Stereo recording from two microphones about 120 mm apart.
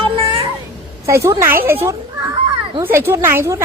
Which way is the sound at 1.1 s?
25° right (ahead or behind).